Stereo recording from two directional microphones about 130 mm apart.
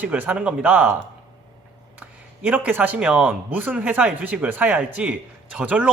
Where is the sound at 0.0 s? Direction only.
10° right (ahead or behind).